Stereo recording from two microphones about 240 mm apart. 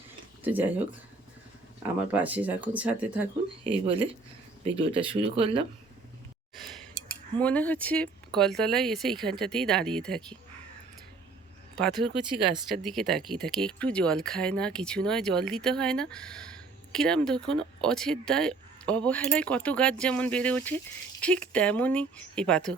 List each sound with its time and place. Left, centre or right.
0.4 s speech: centre
1.8 s speech: centre
3.6 s speech: right
6.6 s a sound: centre
8.4 s speech: centre
11.8 s speech: centre